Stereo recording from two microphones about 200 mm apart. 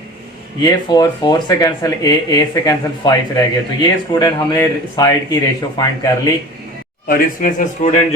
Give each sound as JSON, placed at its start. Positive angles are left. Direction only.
{"t": 0.6, "sound": "speech", "side_deg": 20}
{"t": 7.1, "sound": "a man's voice", "side_deg": 40}